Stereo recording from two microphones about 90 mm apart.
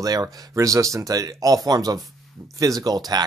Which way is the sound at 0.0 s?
45° right (ahead or behind).